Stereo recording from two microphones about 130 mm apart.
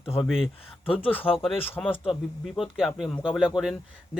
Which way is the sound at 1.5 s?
15° left (ahead or behind).